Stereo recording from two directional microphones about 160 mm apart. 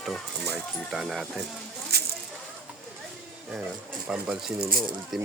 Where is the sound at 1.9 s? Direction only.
80° right.